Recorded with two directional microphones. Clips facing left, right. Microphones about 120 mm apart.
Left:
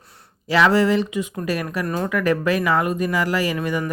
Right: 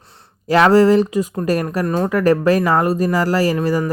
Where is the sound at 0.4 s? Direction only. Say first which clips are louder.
Right 5 dB; 45° right (ahead or behind).